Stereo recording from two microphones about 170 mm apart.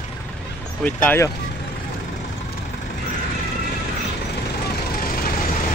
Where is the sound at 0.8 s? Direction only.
10° left (ahead or behind).